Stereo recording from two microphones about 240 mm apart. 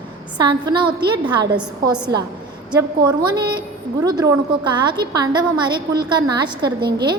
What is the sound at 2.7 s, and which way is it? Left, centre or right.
A woman's voice, centre.